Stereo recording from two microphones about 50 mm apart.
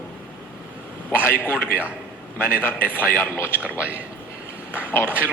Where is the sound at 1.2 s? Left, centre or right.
Left.